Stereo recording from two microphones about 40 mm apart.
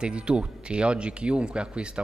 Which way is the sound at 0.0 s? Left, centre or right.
Right.